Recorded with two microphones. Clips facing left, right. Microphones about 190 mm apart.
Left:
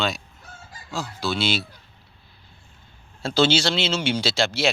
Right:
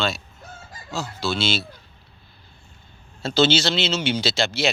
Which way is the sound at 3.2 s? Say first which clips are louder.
Right 1 dB; 10° left (ahead or behind).